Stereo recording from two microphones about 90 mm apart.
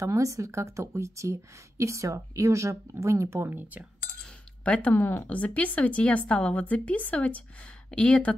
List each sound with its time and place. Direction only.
0.0 s a woman's voice: 35° right (ahead or behind)
4.2 s speech: 10° left (ahead or behind)